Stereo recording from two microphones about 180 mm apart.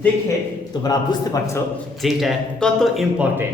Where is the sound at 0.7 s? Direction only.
20° left (ahead or behind).